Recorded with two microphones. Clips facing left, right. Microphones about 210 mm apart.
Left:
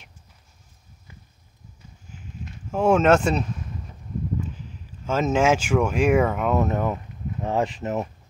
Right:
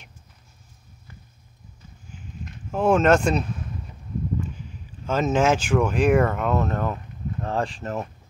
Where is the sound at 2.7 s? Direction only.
10° left (ahead or behind).